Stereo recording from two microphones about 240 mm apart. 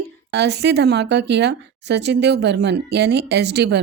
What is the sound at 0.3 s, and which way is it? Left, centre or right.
A woman's voice, right.